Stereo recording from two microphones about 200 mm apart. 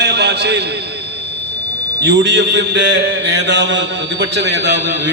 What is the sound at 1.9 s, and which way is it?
A man's voice, 60° right (ahead or behind).